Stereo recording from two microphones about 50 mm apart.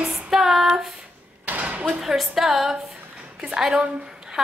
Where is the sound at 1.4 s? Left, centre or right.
Right.